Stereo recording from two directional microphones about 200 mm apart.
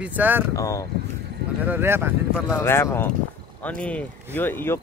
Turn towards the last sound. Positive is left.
turn(degrees=10)  # may be behind; listen again after turning